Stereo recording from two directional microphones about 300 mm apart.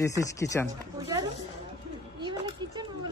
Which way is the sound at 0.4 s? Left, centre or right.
Centre.